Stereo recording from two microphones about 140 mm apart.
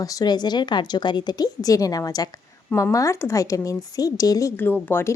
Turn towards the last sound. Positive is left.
turn(degrees=15)  # may be behind; listen again after turning